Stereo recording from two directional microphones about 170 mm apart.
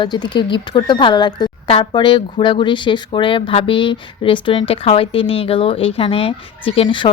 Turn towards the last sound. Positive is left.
turn(degrees=30)  # may be behind; listen again after turning